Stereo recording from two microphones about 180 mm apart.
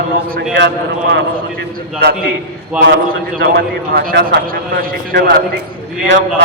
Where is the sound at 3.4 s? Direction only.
60° right (ahead or behind).